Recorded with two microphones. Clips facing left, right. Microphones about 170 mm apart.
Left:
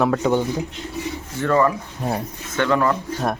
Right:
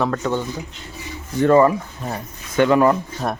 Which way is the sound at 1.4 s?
20° right (ahead or behind).